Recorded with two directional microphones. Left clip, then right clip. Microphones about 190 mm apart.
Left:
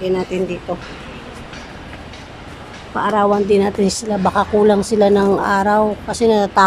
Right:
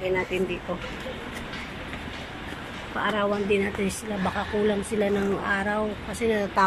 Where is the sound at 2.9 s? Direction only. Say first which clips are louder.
Left 11 dB; 20° left (ahead or behind).